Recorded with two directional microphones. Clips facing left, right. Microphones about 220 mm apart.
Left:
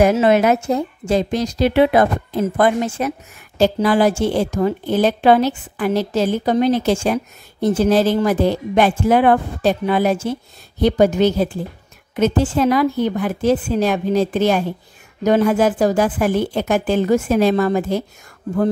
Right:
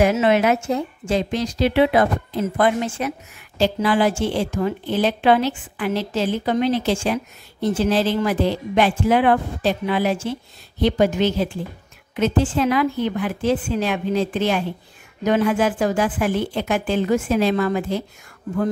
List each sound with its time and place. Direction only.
0.0 s a woman's voice: 40° left (ahead or behind)